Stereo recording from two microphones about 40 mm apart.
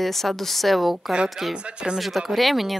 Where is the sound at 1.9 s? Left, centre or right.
Centre.